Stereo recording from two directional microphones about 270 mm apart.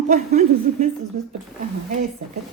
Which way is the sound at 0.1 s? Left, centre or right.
Right.